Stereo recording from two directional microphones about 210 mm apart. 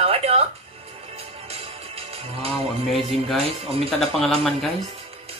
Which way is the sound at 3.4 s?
30° right (ahead or behind).